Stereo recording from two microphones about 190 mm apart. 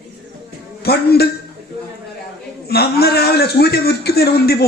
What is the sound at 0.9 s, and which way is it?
Music, 55° left (ahead or behind).